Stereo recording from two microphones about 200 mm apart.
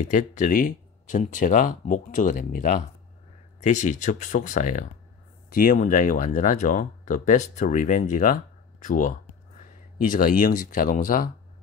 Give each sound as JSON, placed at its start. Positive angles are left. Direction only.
{"t": 0.0, "sound": "speech", "side_deg": 40}